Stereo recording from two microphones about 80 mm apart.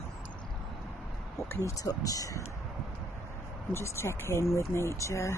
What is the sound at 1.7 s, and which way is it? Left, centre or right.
Speech, left.